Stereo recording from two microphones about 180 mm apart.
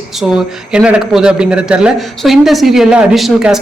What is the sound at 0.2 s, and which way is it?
Speech, 5° right (ahead or behind).